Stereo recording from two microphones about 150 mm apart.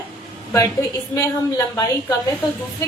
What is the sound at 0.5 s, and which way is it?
A woman's voice, 20° left (ahead or behind).